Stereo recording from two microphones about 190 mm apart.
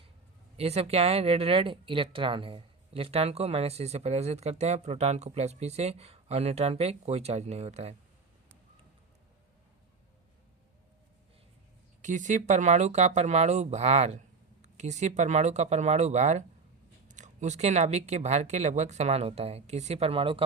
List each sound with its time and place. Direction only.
0.5 s speech: 35° right (ahead or behind)
12.0 s speech: 40° right (ahead or behind)